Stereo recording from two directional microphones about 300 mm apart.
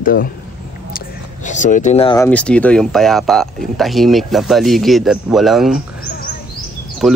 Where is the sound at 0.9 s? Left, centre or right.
Left.